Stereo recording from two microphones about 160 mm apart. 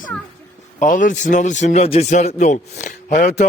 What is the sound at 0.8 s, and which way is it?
Speech, 55° left (ahead or behind).